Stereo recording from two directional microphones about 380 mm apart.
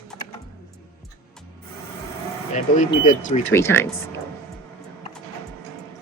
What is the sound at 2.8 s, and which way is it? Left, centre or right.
Speech, centre.